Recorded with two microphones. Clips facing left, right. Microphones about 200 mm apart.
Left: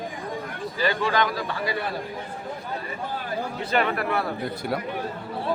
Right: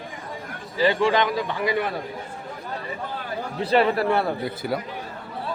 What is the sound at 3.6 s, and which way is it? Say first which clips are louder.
Speech: right 6 dB; 35° right (ahead or behind).